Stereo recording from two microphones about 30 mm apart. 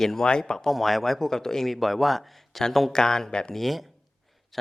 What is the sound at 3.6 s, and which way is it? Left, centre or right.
Speech, centre.